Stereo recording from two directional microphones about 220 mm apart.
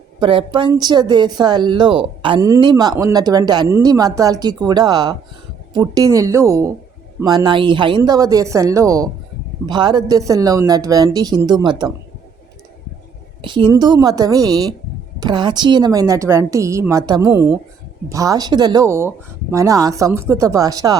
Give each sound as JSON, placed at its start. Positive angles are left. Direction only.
{"t": 0.2, "sound": "speech", "side_deg": -25}
{"t": 13.4, "sound": "speech", "side_deg": -20}